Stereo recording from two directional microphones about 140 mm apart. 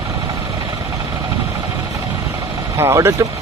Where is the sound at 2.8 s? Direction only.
20° right (ahead or behind).